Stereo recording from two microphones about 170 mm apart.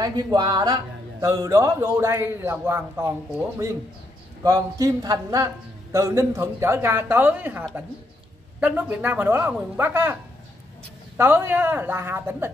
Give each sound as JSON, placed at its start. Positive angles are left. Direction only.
{"t": 0.0, "sound": "a man's voice", "side_deg": -25}
{"t": 11.1, "sound": "a man's voice", "side_deg": -10}